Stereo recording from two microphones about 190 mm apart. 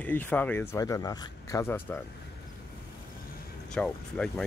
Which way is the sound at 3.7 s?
5° left (ahead or behind).